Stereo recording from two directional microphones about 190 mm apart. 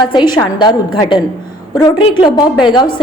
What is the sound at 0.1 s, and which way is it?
A woman's voice, 25° left (ahead or behind).